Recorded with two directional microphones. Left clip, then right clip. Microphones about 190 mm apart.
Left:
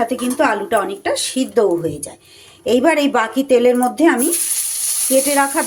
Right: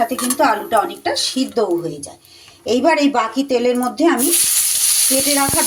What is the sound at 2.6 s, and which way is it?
Speech, 15° left (ahead or behind).